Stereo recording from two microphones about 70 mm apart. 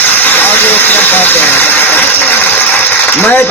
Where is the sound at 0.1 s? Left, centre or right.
Left.